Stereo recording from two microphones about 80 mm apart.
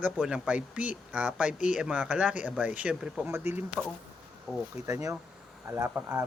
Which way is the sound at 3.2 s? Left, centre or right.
Right.